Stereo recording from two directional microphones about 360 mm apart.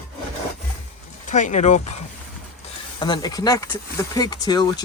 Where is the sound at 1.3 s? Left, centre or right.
Centre.